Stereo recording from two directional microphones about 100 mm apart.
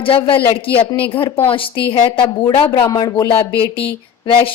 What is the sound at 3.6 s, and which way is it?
Speech, 65° left (ahead or behind).